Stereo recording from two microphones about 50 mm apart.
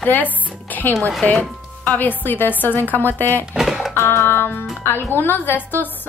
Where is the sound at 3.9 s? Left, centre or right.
Left.